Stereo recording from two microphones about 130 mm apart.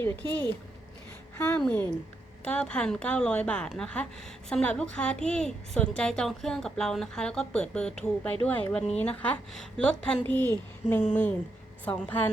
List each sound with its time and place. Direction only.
0.0 s a woman's voice: 15° left (ahead or behind)
0.3 s speech: 35° right (ahead or behind)
1.4 s a woman's voice: 15° left (ahead or behind)